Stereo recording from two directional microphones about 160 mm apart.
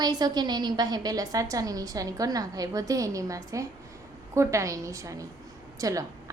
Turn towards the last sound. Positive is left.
turn(degrees=-20)  # may be behind; listen again after turning